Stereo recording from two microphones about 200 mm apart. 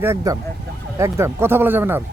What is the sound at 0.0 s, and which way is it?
A man's voice, 10° right (ahead or behind).